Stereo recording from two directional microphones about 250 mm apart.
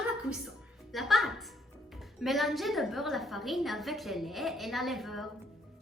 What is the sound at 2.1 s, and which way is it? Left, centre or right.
A woman's voice, centre.